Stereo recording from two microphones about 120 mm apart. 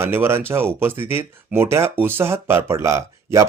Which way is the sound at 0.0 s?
20° right (ahead or behind).